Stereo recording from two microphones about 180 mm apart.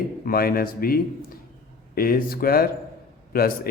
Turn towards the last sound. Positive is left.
turn(degrees=55)  # may be behind; listen again after turning